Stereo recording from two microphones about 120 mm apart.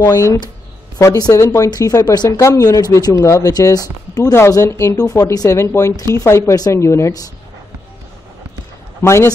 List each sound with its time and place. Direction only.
0.9 s speech: 30° left (ahead or behind)
9.0 s speech: 20° left (ahead or behind)